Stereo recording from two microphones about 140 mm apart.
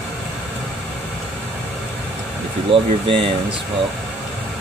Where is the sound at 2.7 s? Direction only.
40° right (ahead or behind).